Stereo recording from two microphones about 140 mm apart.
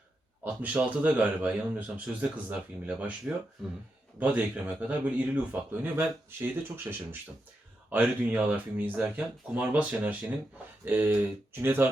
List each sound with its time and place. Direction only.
0.4 s speech: 10° right (ahead or behind)